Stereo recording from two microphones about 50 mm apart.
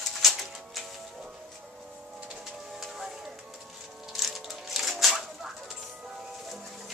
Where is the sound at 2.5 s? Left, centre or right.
Centre.